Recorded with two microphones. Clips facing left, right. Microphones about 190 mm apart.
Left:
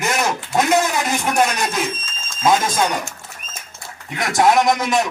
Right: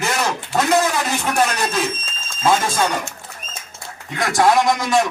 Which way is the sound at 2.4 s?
15° left (ahead or behind).